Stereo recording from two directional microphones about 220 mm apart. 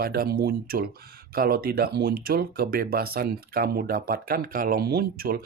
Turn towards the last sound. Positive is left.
turn(degrees=-45)  # may be behind; listen again after turning